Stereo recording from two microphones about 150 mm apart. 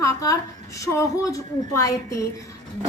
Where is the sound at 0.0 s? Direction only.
20° left (ahead or behind).